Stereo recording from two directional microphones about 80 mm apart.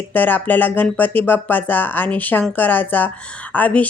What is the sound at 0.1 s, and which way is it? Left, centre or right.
Speech, left.